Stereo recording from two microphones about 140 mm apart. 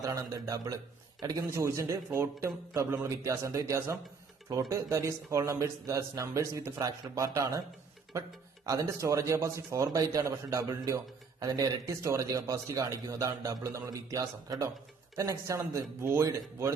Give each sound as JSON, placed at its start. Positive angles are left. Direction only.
{"t": 0.0, "sound": "a man's voice", "side_deg": -25}
{"t": 8.6, "sound": "a man's voice", "side_deg": -25}